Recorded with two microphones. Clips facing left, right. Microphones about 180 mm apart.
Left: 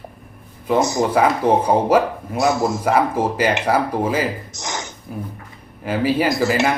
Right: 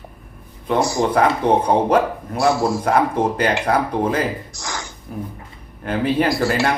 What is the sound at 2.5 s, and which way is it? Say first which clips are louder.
Speech: right 2 dB; 20° left (ahead or behind).